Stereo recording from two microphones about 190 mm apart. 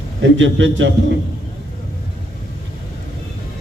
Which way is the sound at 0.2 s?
75° right (ahead or behind).